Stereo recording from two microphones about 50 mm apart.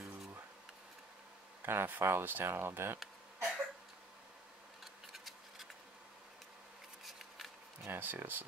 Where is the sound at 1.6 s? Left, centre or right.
Right.